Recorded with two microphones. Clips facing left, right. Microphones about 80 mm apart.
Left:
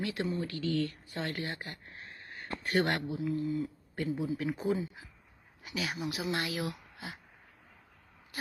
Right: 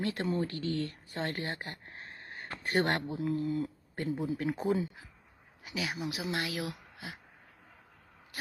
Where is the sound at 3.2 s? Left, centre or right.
Right.